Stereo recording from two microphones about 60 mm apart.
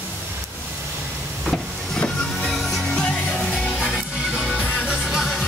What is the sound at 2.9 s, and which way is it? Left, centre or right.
Music, left.